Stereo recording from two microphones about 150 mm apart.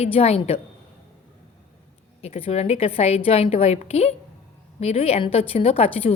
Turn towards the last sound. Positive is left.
turn(degrees=40)  # may be behind; listen again after turning